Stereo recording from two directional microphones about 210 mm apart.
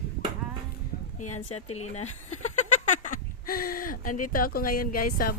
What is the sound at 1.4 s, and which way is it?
Speech, 30° left (ahead or behind).